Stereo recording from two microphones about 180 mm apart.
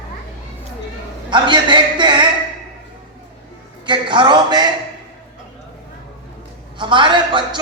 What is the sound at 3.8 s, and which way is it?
Speech, 25° right (ahead or behind).